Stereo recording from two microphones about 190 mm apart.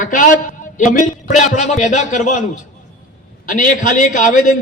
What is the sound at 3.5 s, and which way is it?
A man's voice, 45° left (ahead or behind).